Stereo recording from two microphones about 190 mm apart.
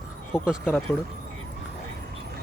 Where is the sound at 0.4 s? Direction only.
5° right (ahead or behind).